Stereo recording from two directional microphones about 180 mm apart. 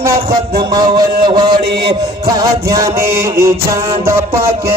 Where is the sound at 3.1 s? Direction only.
15° right (ahead or behind).